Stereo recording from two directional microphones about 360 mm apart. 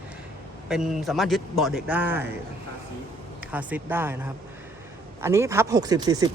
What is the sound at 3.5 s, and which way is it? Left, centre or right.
Speech, centre.